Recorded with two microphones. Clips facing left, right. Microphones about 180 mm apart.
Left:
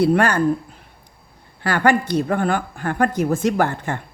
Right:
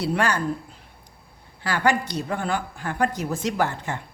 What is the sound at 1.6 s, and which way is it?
Speech, 55° left (ahead or behind).